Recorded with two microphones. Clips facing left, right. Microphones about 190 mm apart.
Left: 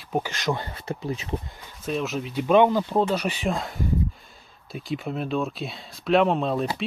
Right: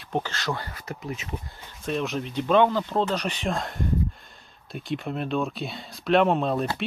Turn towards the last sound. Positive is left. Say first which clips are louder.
# even
turn(degrees=0)  # may be behind; listen again after turning